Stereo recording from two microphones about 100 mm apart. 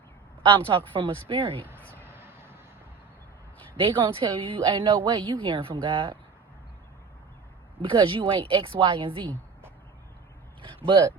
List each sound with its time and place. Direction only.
0.4 s speech: 60° right (ahead or behind)
2.0 s a sound: 25° right (ahead or behind)
3.8 s speech: 55° right (ahead or behind)
7.8 s speech: 55° right (ahead or behind)
10.8 s speech: 50° right (ahead or behind)